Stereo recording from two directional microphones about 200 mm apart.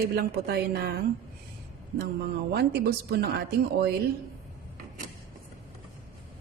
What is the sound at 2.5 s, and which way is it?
Speech, 55° right (ahead or behind).